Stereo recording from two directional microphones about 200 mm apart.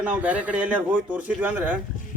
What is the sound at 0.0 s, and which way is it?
Speech, 5° right (ahead or behind).